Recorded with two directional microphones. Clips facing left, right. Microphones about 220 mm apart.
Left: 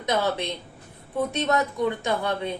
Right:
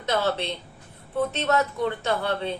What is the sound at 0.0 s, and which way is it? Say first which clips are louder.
Speech: even; 15° left (ahead or behind).